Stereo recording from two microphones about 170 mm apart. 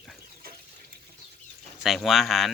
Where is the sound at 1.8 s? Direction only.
Centre (ahead or behind).